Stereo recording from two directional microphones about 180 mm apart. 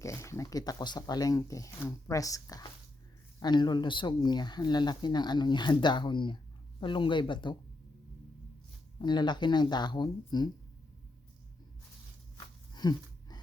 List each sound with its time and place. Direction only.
0.0 s speech: 15° left (ahead or behind)
9.0 s speech: 25° left (ahead or behind)
12.7 s a sound: 25° left (ahead or behind)